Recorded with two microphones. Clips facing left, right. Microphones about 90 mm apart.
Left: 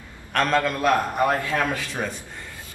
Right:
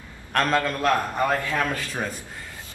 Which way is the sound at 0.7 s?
15° left (ahead or behind).